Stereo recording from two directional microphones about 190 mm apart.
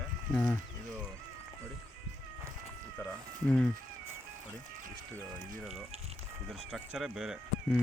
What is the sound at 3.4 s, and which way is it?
Speech, 5° left (ahead or behind).